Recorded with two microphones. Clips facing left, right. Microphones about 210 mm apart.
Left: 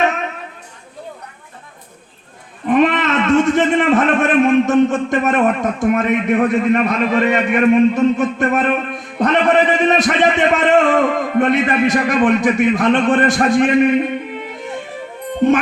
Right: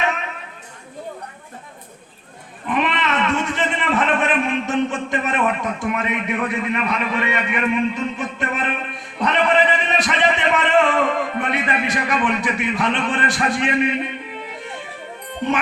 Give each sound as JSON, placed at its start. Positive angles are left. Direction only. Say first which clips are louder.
{"t": 2.6, "sound": "a man's voice", "louder": "left 8 dB", "side_deg": 45}